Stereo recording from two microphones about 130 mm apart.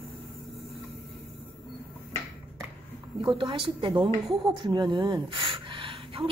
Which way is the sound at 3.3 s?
40° right (ahead or behind).